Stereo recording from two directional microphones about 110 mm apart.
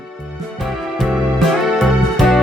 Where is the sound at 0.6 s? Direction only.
Centre (ahead or behind).